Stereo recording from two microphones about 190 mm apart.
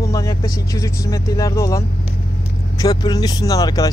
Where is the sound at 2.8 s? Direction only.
20° left (ahead or behind).